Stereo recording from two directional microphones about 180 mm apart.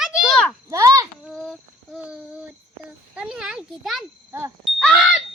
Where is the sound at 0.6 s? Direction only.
15° right (ahead or behind).